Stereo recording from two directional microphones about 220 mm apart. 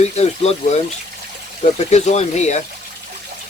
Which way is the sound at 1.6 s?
30° left (ahead or behind).